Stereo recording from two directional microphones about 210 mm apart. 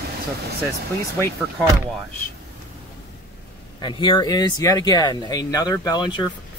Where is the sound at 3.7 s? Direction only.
20° left (ahead or behind).